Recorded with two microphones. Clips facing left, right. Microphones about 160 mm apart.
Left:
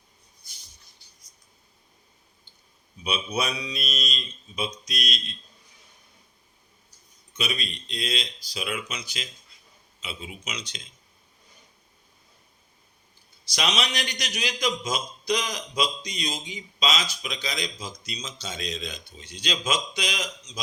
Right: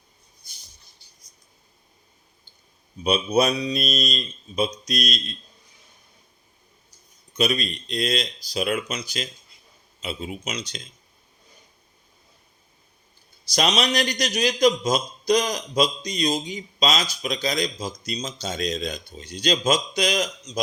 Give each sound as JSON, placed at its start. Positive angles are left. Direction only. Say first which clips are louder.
{"t": 3.0, "sound": "a man's voice", "louder": "right 8 dB", "side_deg": -40}
{"t": 7.3, "sound": "a man's voice", "louder": "right 8 dB", "side_deg": -40}
{"t": 13.5, "sound": "a man's voice", "louder": "right 6 dB", "side_deg": -40}